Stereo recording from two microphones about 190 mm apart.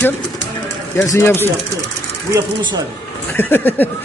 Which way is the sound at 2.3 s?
25° right (ahead or behind).